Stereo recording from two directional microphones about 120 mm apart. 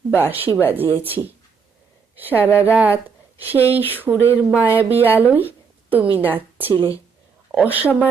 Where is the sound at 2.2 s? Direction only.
15° right (ahead or behind).